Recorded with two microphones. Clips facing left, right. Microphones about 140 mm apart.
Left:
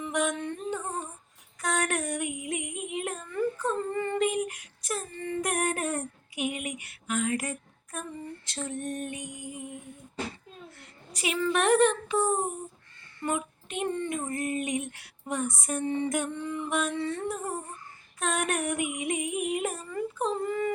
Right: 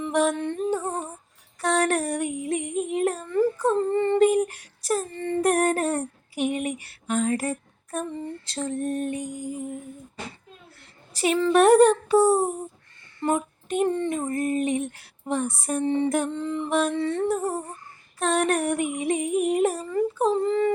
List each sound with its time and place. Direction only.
0.0 s music: 30° right (ahead or behind)
1.6 s child singing: 30° right (ahead or behind)
8.4 s female singing: 35° right (ahead or behind)
11.1 s female singing: 35° right (ahead or behind)